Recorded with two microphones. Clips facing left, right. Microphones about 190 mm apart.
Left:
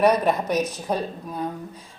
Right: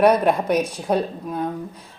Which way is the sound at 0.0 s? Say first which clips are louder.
Right 3 dB; 10° right (ahead or behind).